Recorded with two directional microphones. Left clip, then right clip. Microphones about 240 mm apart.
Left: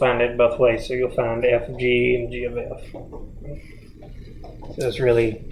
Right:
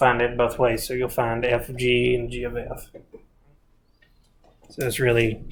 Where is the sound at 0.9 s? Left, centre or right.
Right.